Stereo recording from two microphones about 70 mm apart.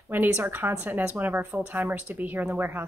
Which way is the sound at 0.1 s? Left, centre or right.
Right.